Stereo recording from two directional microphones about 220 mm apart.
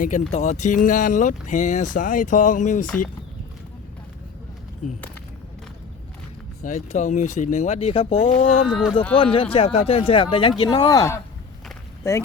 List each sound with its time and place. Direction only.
0.0 s speech: 30° left (ahead or behind)
6.7 s speech: 30° left (ahead or behind)
8.6 s speech: 5° right (ahead or behind)
9.1 s speech: 25° left (ahead or behind)